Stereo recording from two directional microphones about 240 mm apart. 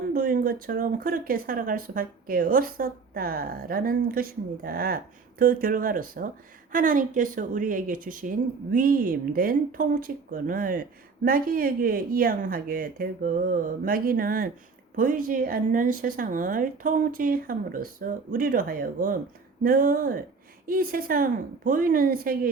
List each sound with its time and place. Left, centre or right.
0.1 s speech: right